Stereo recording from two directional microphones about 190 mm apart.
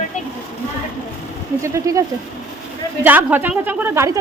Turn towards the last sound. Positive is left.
turn(degrees=-15)  # may be behind; listen again after turning